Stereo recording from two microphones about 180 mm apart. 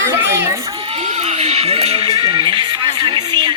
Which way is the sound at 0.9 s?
35° right (ahead or behind).